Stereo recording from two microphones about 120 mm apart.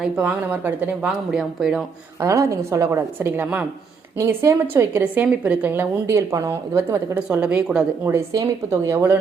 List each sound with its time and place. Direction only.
0.0 s speech: 10° right (ahead or behind)
2.2 s a woman's voice: 25° right (ahead or behind)
4.2 s a woman's voice: 25° right (ahead or behind)
7.2 s speech: 10° right (ahead or behind)
8.3 s a woman's voice: 30° right (ahead or behind)